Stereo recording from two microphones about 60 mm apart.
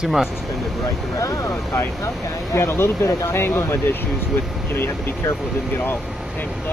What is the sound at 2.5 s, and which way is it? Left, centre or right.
Speech, left.